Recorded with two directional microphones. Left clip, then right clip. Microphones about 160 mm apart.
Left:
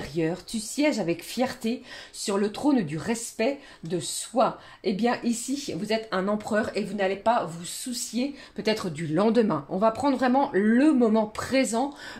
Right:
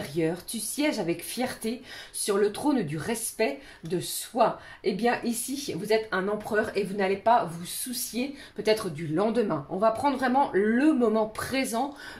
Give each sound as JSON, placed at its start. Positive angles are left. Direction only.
{"t": 0.0, "sound": "speech", "side_deg": 35}